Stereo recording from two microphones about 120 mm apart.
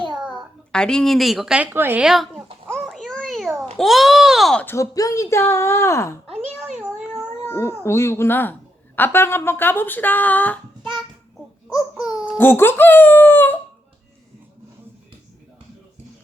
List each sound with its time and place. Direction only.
0.3 s a woman's voice: 5° left (ahead or behind); by 2.0 s 15° right (ahead or behind)
2.0 s speech: centre (ahead or behind)
2.6 s a sound: centre (ahead or behind)
3.8 s speech: centre (ahead or behind)
4.6 s speech: 25° left (ahead or behind)
6.7 s a sound: 5° right (ahead or behind)
7.4 s speech: 20° left (ahead or behind)
11.7 s a sound: 5° right (ahead or behind)
12.2 s speech: 20° left (ahead or behind)